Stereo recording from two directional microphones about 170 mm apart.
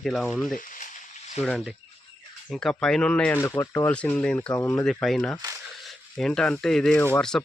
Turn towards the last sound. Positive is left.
turn(degrees=5)  # may be behind; listen again after turning